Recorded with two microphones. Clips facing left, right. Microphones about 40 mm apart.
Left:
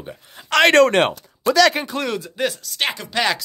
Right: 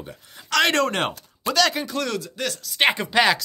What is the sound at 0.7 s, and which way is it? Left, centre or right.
Speech, left.